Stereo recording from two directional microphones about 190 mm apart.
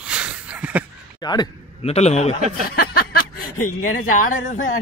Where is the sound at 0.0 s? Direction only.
5° right (ahead or behind).